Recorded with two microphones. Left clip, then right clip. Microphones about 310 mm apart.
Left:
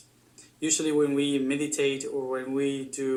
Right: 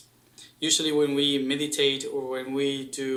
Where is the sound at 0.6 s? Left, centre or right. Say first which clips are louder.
Right 2 dB; right.